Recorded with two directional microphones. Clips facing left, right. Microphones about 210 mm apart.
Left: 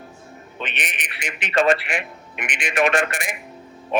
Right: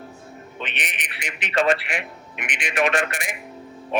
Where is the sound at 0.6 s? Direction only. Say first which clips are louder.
Left 2 dB; 45° left (ahead or behind).